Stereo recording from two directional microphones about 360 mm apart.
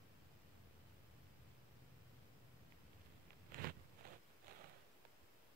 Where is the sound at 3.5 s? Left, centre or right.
Right.